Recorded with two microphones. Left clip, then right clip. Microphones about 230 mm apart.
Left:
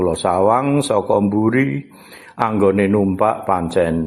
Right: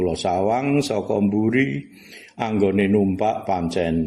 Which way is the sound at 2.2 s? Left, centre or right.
Left.